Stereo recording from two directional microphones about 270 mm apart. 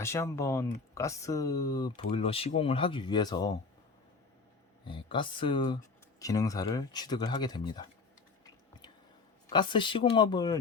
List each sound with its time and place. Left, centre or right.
0.0 s speech: centre
4.9 s speech: centre
9.5 s speech: centre